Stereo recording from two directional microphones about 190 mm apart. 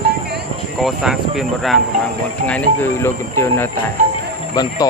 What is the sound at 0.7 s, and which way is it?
Speech, centre (ahead or behind).